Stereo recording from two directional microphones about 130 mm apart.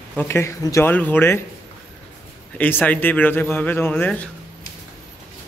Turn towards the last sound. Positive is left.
turn(degrees=15)  # may be behind; listen again after turning